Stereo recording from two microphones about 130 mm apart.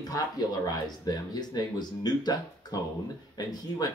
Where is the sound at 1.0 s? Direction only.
30° left (ahead or behind).